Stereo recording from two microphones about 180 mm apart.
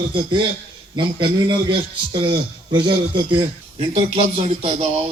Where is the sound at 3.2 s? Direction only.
30° right (ahead or behind).